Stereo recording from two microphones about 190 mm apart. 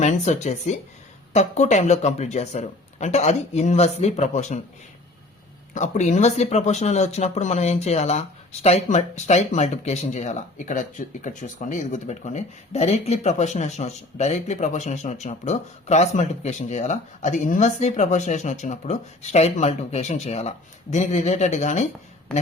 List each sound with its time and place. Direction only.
0.0 s speech: 35° left (ahead or behind)
5.7 s speech: 40° left (ahead or behind)